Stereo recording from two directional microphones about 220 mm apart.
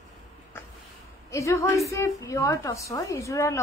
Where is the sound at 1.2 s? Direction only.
15° left (ahead or behind).